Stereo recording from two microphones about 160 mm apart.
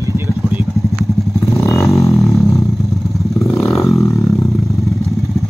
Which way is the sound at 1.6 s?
20° left (ahead or behind).